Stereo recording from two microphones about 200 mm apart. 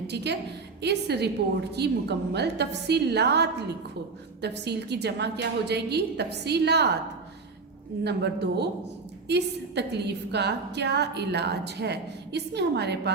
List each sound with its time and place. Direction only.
0.8 s a woman's voice: 55° right (ahead or behind)
8.0 s a woman's voice: 55° right (ahead or behind)